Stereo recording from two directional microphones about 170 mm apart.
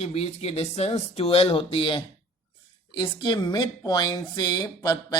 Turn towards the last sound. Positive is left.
turn(degrees=25)  # may be behind; listen again after turning